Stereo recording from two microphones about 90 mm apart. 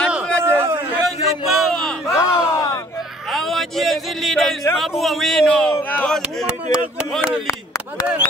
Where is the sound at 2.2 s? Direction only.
40° left (ahead or behind).